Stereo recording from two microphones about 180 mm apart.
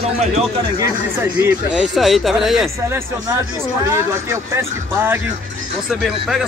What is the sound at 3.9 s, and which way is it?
Speech, 15° right (ahead or behind).